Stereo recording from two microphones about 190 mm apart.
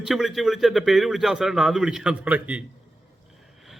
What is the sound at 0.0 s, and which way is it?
A man's voice, centre (ahead or behind).